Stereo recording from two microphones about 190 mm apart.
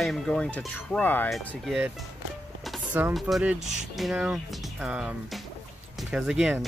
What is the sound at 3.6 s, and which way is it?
Speech, 40° right (ahead or behind).